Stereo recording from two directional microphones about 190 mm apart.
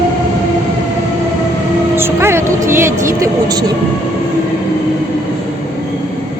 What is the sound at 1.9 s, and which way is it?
Speech, 10° right (ahead or behind).